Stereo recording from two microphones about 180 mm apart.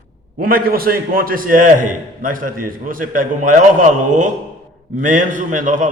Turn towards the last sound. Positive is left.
turn(degrees=-45)  # may be behind; listen again after turning